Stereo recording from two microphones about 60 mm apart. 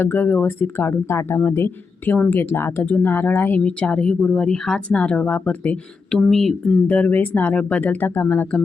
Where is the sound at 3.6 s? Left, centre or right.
Centre.